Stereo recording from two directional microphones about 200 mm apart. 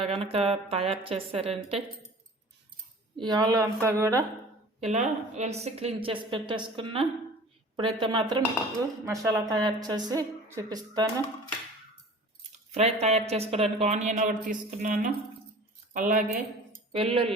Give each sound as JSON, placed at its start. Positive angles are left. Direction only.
{"t": 0.0, "sound": "a woman's voice", "side_deg": -30}
{"t": 3.2, "sound": "a woman's voice", "side_deg": -20}
{"t": 4.8, "sound": "a woman's voice", "side_deg": -35}
{"t": 12.7, "sound": "speech", "side_deg": -35}
{"t": 16.9, "sound": "a woman's voice", "side_deg": -30}